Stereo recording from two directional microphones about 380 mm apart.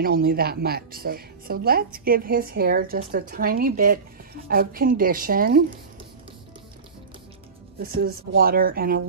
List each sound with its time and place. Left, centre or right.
0.0 s a woman's voice: right
7.8 s a woman's voice: right